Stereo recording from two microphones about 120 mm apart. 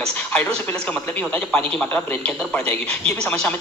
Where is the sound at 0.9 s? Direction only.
10° left (ahead or behind).